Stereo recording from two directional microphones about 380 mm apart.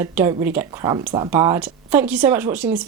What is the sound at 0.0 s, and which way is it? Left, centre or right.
Speech, centre.